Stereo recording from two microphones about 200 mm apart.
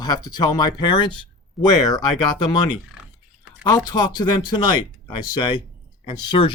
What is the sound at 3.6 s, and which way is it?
Speech, 20° left (ahead or behind).